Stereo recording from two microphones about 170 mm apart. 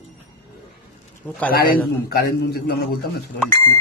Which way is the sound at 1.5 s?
60° left (ahead or behind).